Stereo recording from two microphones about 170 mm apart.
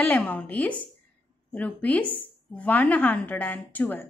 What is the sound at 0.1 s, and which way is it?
A woman's voice, 10° left (ahead or behind).